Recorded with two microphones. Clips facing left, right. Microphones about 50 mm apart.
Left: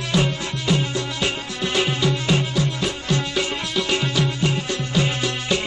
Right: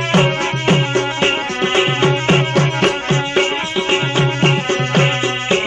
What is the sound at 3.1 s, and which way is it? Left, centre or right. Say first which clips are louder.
Music: right 7 dB; right.